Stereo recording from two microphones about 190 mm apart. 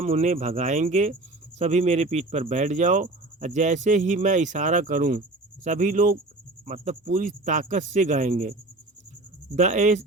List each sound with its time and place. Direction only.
0.0 s speech: 40° right (ahead or behind)
9.6 s speech: 40° right (ahead or behind)